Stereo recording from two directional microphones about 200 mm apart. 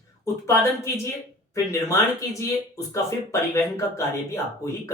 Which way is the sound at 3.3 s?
15° left (ahead or behind).